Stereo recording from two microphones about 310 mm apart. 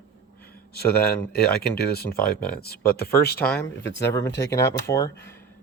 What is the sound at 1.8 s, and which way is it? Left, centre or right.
Speech, left.